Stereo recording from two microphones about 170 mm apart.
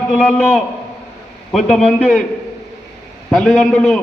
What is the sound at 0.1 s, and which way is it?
A man's voice, 5° left (ahead or behind).